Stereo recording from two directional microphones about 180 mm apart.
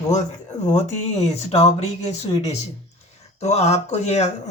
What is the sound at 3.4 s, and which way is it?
Speech, 35° left (ahead or behind).